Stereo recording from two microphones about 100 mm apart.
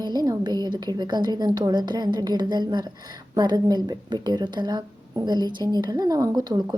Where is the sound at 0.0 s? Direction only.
40° right (ahead or behind).